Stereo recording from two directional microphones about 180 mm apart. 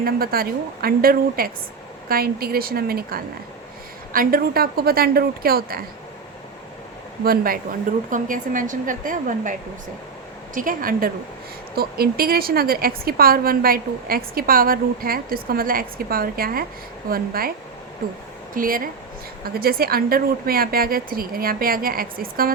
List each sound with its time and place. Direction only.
0.0 s a woman's voice: 55° right (ahead or behind)
7.3 s a woman's voice: 55° right (ahead or behind)